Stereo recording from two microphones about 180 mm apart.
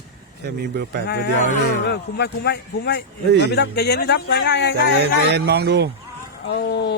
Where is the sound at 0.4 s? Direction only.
65° right (ahead or behind).